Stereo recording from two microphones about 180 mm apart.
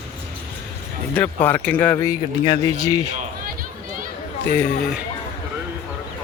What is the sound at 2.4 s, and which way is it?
Speech, 25° left (ahead or behind).